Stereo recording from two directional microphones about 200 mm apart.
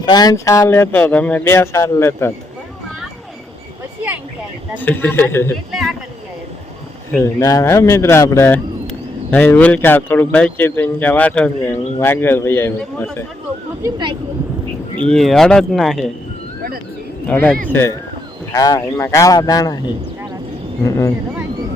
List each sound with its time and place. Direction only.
0.0 s speech: 20° left (ahead or behind)
4.8 s speech: 10° left (ahead or behind)
7.1 s speech: 15° left (ahead or behind)
13.8 s speech: 25° right (ahead or behind)
15.0 s speech: centre (ahead or behind)
17.2 s speech: 5° left (ahead or behind)